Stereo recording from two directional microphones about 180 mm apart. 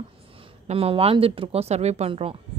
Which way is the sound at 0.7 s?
30° right (ahead or behind).